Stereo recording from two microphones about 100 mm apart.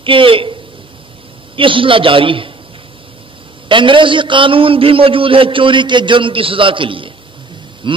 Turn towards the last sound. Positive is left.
turn(degrees=-55)  # may be behind; listen again after turning